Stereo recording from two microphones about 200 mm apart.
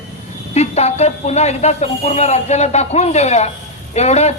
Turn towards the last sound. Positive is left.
turn(degrees=35)  # may be behind; listen again after turning